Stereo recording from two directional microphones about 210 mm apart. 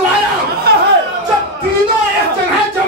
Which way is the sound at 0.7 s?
50° right (ahead or behind).